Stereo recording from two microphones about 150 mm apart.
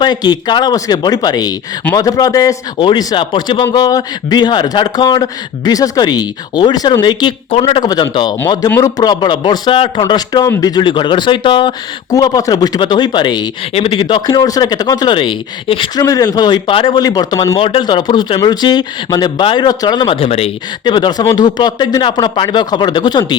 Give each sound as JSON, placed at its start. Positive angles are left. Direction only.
{"t": 0.0, "sound": "speech", "side_deg": 30}
{"t": 14.0, "sound": "speech", "side_deg": 30}